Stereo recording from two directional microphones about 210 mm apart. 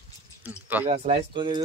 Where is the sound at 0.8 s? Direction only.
30° right (ahead or behind).